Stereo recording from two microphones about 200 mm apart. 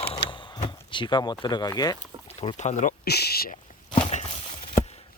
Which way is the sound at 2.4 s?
35° left (ahead or behind).